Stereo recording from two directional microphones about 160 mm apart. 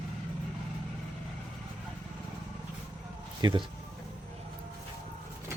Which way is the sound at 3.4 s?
25° right (ahead or behind).